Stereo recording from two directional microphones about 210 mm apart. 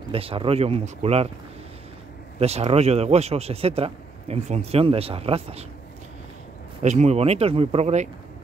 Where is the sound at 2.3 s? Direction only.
30° right (ahead or behind).